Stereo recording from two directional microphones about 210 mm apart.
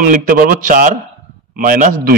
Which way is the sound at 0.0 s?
40° right (ahead or behind).